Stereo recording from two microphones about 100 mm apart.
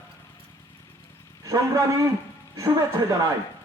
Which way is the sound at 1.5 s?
35° right (ahead or behind).